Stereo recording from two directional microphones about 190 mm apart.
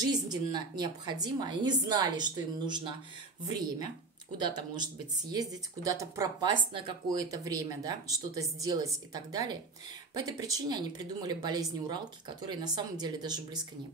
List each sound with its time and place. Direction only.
0.0 s speech: 20° right (ahead or behind)
5.3 s speech: 20° right (ahead or behind)